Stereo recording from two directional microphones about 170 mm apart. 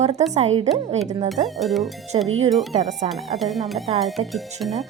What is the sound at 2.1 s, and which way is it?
Speech, 30° right (ahead or behind).